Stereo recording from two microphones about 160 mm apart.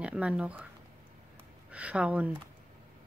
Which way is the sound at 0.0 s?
5° right (ahead or behind).